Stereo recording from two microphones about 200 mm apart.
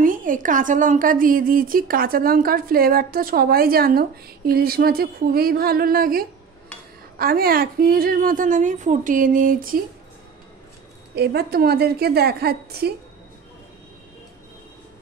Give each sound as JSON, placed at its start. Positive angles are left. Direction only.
{"t": 0.0, "sound": "a woman's voice", "side_deg": -40}
{"t": 11.1, "sound": "a woman's voice", "side_deg": -50}